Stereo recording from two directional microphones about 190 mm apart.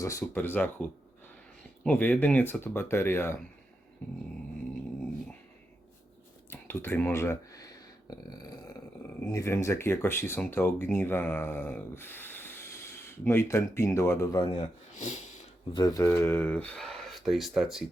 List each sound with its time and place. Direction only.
0.0 s speech: 15° left (ahead or behind)
6.5 s a sound: 10° left (ahead or behind)
9.3 s speech: 15° left (ahead or behind)
14.9 s snort: 40° left (ahead or behind)
15.7 s speech: 20° left (ahead or behind); by 17.8 s centre (ahead or behind)